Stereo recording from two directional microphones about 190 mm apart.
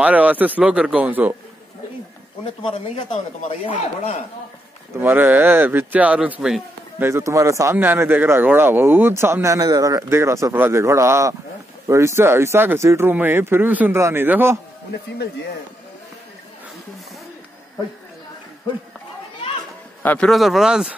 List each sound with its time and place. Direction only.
0.0 s a man's voice: 5° right (ahead or behind)
2.6 s speech: 30° left (ahead or behind)
5.0 s a man's voice: 10° right (ahead or behind)
20.0 s speech: 5° left (ahead or behind)